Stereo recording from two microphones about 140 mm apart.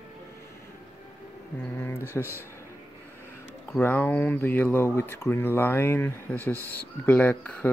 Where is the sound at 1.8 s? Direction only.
15° left (ahead or behind).